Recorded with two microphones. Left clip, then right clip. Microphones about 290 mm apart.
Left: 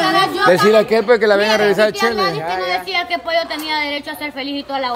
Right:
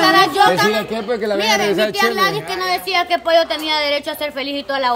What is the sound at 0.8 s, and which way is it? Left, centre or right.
Speech, centre.